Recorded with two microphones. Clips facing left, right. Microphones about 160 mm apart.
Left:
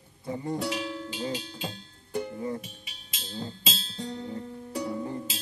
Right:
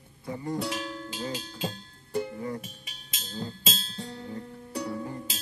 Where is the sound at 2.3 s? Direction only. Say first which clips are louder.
Left 1 dB; 20° left (ahead or behind).